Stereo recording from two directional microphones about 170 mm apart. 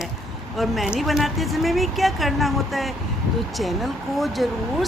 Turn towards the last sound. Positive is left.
turn(degrees=0)  # may be behind; listen again after turning